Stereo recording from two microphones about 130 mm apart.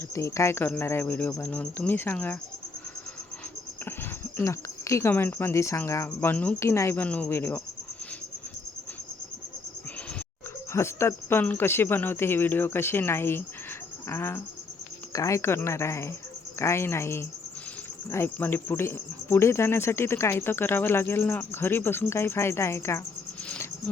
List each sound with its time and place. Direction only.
0.1 s speech: 20° left (ahead or behind)
4.4 s speech: 20° left (ahead or behind)
10.7 s speech: 20° left (ahead or behind)